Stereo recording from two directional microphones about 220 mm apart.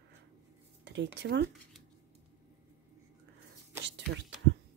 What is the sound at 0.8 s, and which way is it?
Speech, 55° right (ahead or behind).